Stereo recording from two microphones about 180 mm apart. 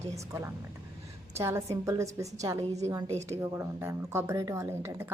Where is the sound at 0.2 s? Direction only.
15° right (ahead or behind).